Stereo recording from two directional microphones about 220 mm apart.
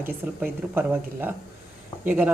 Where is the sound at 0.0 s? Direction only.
10° right (ahead or behind).